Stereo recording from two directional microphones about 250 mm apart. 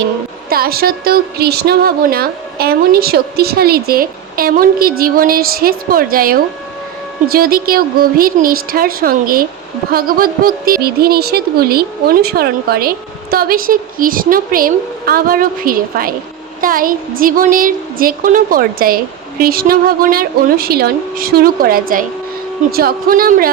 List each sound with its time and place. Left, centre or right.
0.5 s a woman's voice: right